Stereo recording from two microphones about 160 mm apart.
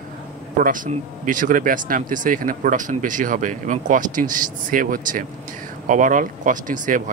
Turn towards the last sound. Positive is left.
turn(degrees=-55)  # may be behind; listen again after turning